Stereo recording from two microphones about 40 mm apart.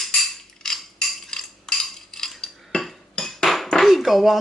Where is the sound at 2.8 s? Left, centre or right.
Centre.